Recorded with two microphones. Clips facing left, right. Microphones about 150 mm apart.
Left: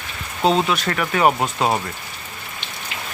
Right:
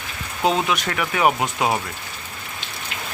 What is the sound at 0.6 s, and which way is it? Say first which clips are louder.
Speech: left 2 dB; 10° right (ahead or behind).